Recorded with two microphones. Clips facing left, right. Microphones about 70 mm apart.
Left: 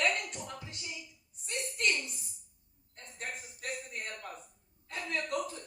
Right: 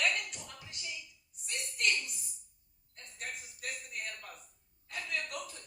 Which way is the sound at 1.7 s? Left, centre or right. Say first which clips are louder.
Even; left.